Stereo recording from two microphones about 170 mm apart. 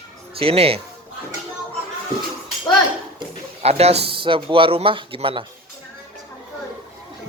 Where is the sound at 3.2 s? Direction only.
35° right (ahead or behind).